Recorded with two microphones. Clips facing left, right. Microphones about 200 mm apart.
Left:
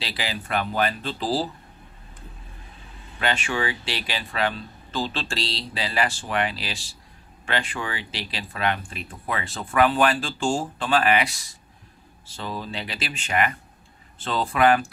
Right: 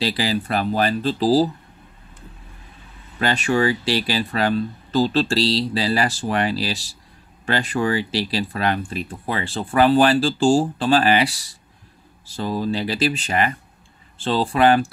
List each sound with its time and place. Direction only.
0.0 s speech: 40° right (ahead or behind)
3.2 s speech: 40° right (ahead or behind)